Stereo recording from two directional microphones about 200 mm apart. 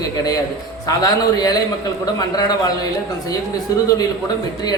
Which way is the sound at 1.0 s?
20° left (ahead or behind).